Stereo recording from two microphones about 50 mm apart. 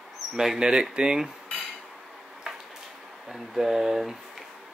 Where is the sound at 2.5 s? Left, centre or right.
Centre.